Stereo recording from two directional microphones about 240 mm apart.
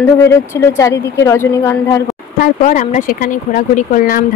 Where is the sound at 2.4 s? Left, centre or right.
Left.